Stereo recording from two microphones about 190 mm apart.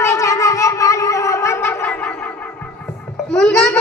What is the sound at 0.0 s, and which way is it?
Gargling, 15° left (ahead or behind).